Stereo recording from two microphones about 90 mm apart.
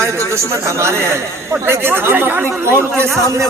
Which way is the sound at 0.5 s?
30° right (ahead or behind).